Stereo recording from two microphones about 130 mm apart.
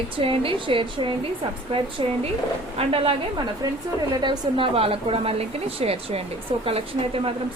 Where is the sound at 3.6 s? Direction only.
30° right (ahead or behind); by 6.6 s 45° right (ahead or behind).